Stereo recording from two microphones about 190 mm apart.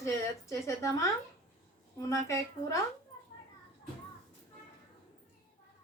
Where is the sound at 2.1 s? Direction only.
15° left (ahead or behind).